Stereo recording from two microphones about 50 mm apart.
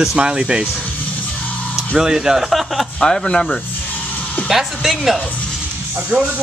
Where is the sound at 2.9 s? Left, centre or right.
Centre.